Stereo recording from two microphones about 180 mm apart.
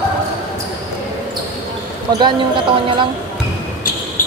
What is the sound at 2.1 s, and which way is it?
A woman's voice, 25° right (ahead or behind).